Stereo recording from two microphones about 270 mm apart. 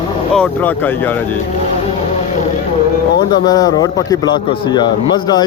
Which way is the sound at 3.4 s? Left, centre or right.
Centre.